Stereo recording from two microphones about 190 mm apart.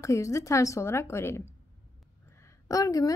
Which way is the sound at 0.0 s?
15° left (ahead or behind).